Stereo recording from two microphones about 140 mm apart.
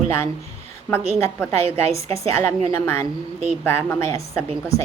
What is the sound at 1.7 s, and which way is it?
A woman's voice, 20° left (ahead or behind).